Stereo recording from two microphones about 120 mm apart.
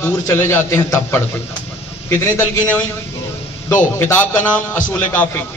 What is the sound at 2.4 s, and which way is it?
A man's voice, 15° left (ahead or behind).